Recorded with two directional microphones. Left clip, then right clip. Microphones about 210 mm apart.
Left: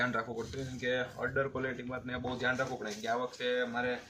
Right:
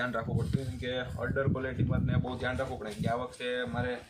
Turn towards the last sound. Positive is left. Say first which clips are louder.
# left 1 dB
turn(degrees=-5)  # may be behind; listen again after turning